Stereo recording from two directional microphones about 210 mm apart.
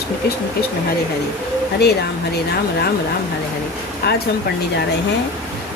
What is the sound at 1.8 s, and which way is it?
Speech, 50° left (ahead or behind).